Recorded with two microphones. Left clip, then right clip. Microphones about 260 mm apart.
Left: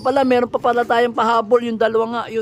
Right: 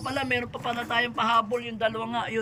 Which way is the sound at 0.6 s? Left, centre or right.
Centre.